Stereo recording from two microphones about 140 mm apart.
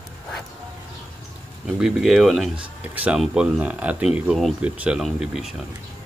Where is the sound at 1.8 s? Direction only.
Centre (ahead or behind).